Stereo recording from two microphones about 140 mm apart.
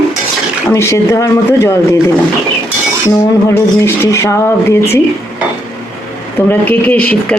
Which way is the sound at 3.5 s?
20° left (ahead or behind).